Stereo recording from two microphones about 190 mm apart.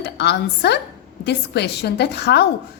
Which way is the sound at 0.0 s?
60° left (ahead or behind).